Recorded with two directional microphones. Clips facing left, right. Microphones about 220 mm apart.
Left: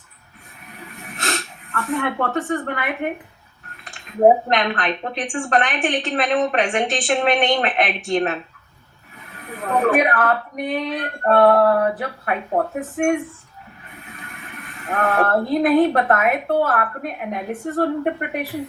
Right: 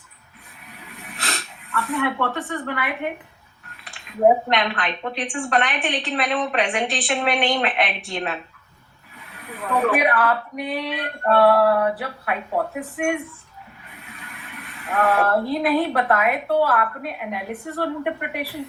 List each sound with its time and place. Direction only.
0.9 s a sound: 45° left (ahead or behind)
4.4 s a woman's voice: 45° left (ahead or behind)
9.5 s a woman's voice: 45° left (ahead or behind)
14.2 s a woman's voice: 45° left (ahead or behind)